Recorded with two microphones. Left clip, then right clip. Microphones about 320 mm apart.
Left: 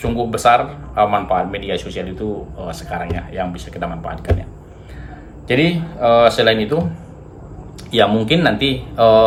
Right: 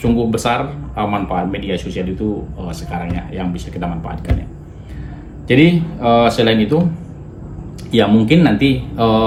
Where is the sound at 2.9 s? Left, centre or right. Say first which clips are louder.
Left 2 dB; centre.